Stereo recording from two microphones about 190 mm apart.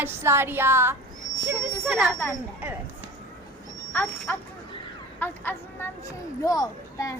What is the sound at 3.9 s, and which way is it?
Dog, 10° left (ahead or behind).